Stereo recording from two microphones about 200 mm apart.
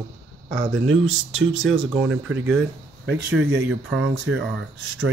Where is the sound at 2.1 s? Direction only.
75° right (ahead or behind).